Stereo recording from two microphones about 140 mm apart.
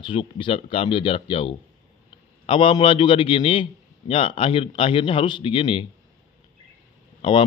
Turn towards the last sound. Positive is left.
turn(degrees=40)  # may be behind; listen again after turning